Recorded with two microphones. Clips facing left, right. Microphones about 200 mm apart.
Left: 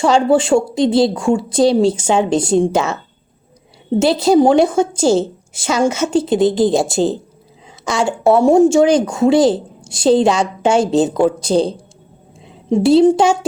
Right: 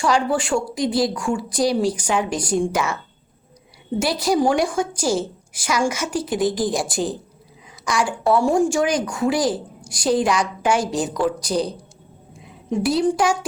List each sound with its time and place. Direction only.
0.0 s a woman's voice: 25° left (ahead or behind)
4.0 s a woman's voice: 25° left (ahead or behind)